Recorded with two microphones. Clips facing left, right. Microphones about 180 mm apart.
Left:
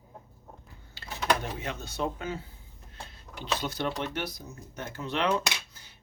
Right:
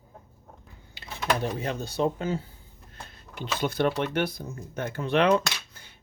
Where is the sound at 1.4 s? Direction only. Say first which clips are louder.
Right 6 dB; 35° right (ahead or behind).